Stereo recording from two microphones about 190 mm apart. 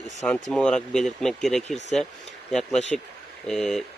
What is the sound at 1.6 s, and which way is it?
Speech, 35° left (ahead or behind).